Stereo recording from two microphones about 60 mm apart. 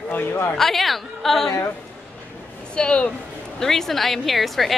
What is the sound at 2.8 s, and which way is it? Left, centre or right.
Speech, centre.